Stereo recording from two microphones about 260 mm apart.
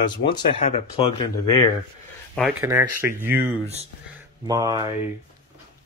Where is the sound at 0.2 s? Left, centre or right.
Left.